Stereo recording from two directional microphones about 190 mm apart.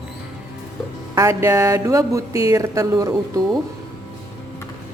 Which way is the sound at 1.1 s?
15° right (ahead or behind).